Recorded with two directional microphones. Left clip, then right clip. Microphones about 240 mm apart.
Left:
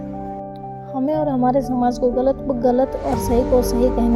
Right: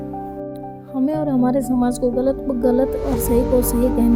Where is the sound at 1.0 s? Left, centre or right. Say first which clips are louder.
Even; right.